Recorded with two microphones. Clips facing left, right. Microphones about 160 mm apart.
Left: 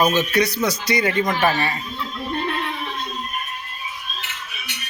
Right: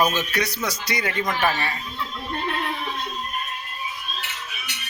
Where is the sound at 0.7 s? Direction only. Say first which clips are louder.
Left 6 dB; 5° right (ahead or behind).